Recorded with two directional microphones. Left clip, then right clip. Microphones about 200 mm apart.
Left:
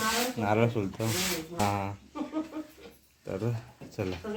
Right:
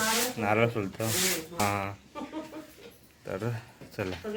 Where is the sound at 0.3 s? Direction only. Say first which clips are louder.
Right 1 dB; centre (ahead or behind).